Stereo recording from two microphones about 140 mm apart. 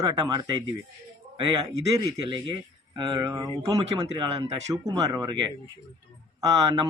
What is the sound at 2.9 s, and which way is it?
Speech, 35° right (ahead or behind).